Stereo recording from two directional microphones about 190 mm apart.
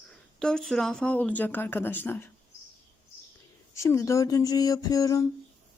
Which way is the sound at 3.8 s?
15° left (ahead or behind).